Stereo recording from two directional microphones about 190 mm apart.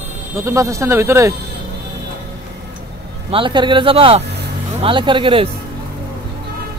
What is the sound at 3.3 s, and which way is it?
Speech, 25° right (ahead or behind).